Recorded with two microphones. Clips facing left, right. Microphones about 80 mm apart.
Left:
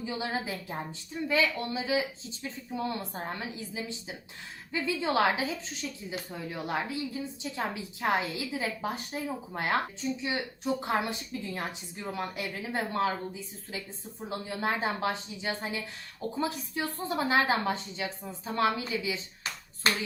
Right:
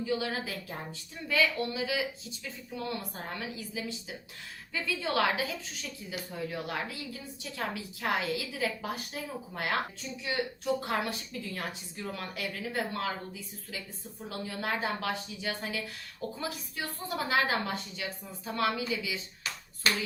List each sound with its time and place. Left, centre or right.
0.0 s a woman's voice: left